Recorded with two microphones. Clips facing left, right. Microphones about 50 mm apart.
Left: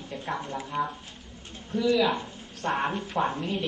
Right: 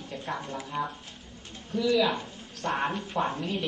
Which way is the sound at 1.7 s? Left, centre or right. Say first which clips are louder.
Left 1 dB; centre.